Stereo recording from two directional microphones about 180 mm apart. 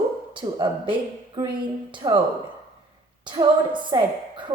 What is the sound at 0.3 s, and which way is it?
Speech, 25° right (ahead or behind).